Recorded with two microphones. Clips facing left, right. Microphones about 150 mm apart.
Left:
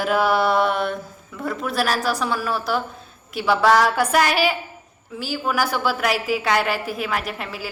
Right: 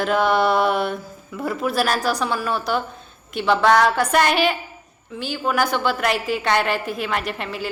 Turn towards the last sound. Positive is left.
turn(degrees=5)  # may be behind; listen again after turning